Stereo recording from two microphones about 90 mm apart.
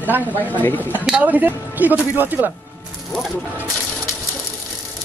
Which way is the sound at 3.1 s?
Centre (ahead or behind).